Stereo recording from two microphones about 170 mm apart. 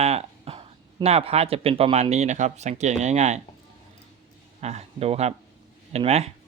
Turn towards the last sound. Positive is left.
turn(degrees=-40)  # may be behind; listen again after turning